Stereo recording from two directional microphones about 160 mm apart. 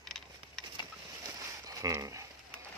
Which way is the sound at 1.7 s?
20° right (ahead or behind).